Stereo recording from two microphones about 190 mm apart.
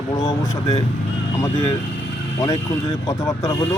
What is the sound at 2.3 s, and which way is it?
Speech, 20° left (ahead or behind).